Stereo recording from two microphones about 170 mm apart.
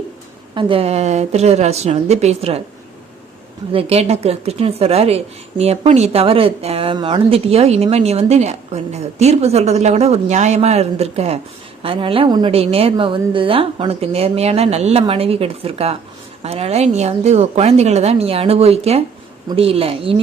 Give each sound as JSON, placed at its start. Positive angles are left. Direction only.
{"t": 0.5, "sound": "speech", "side_deg": -35}
{"t": 3.7, "sound": "speech", "side_deg": -35}